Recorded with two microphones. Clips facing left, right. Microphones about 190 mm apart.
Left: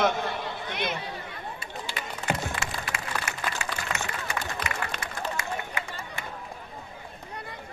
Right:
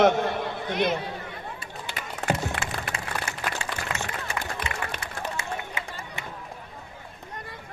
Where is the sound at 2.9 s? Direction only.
30° right (ahead or behind).